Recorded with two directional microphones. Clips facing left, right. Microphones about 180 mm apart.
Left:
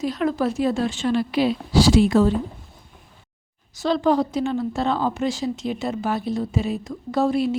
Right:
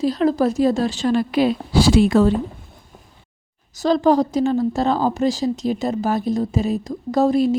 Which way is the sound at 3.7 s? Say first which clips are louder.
Right 4 dB; 40° right (ahead or behind).